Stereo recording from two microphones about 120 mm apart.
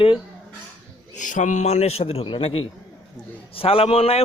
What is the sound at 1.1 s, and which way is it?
A man's voice, 90° left.